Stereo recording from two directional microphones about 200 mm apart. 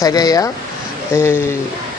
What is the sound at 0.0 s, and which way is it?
Speech, 20° left (ahead or behind).